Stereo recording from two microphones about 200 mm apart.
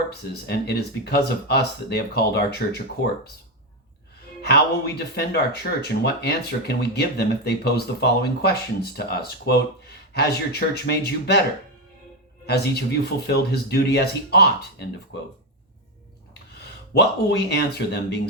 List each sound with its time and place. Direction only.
0.1 s speech: 55° left (ahead or behind)
4.4 s speech: 55° left (ahead or behind)
12.5 s speech: 55° left (ahead or behind)
16.6 s speech: 55° left (ahead or behind)